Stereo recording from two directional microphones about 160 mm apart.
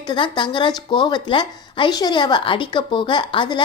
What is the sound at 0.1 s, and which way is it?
A woman's voice, 30° left (ahead or behind).